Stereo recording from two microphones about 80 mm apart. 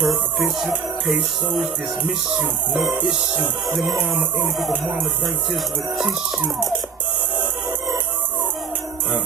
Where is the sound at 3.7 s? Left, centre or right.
Centre.